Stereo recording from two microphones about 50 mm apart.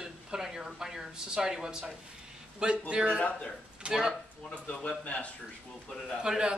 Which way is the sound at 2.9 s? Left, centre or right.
Right.